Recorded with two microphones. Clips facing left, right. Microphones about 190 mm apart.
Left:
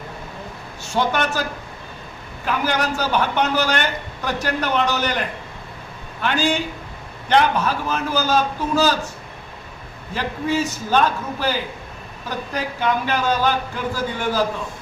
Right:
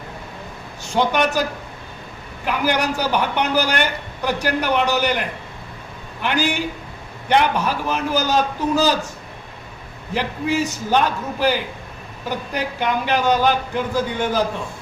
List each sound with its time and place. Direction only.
0.9 s a man's voice: 15° right (ahead or behind)
2.5 s a man's voice: 15° right (ahead or behind)
6.2 s a man's voice: 15° right (ahead or behind)
10.2 s a man's voice: 15° right (ahead or behind)
12.5 s a man's voice: 15° right (ahead or behind)